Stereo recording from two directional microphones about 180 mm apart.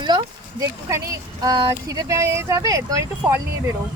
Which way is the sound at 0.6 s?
15° right (ahead or behind).